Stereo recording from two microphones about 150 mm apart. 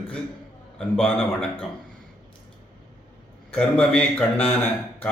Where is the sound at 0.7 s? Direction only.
5° left (ahead or behind).